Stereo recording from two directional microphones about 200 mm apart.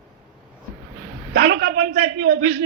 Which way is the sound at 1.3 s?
55° right (ahead or behind).